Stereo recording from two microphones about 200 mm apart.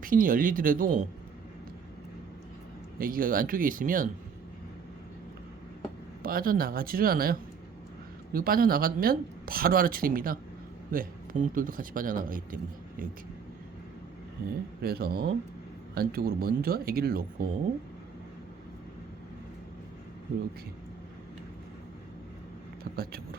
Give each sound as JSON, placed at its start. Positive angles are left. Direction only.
{"t": 0.0, "sound": "speech", "side_deg": -45}
{"t": 3.0, "sound": "speech", "side_deg": -45}
{"t": 6.2, "sound": "speech", "side_deg": -45}
{"t": 14.8, "sound": "speech", "side_deg": -50}
{"t": 22.8, "sound": "speech", "side_deg": -50}